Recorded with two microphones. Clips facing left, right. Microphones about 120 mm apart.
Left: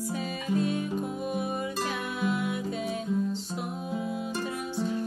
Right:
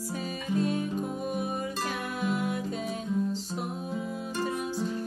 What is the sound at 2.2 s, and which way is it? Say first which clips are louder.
Music: left 1 dB; 45° right (ahead or behind).